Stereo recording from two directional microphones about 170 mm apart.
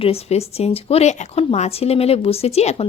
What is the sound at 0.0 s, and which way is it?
Speech, 35° left (ahead or behind).